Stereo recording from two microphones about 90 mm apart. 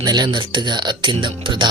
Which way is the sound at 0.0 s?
55° right (ahead or behind).